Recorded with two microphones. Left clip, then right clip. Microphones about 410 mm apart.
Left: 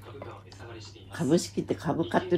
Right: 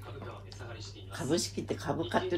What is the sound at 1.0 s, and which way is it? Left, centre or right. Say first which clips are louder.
Speech: left 5 dB; left.